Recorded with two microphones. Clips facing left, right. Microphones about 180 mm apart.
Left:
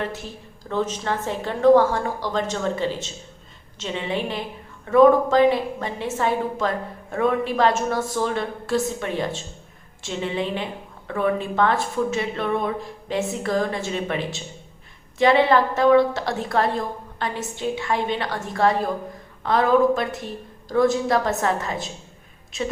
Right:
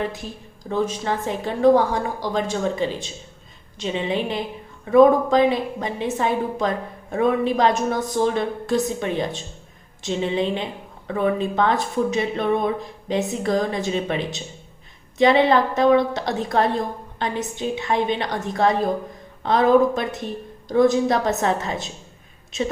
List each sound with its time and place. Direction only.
0.0 s a woman's voice: 15° right (ahead or behind)